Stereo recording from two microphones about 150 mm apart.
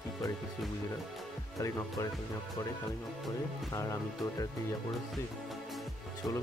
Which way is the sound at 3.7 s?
20° left (ahead or behind).